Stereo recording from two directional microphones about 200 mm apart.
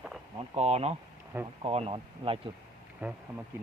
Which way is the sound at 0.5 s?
30° right (ahead or behind).